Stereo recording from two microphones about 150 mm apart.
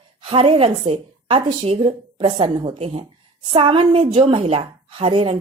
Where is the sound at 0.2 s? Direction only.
35° right (ahead or behind).